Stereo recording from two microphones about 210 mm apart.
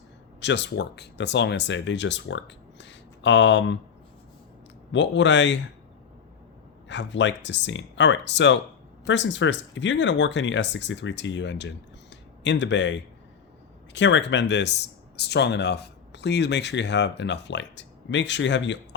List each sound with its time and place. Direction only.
0.3 s speech: 55° left (ahead or behind)
4.9 s speech: 60° left (ahead or behind)
6.8 s speech: 60° left (ahead or behind)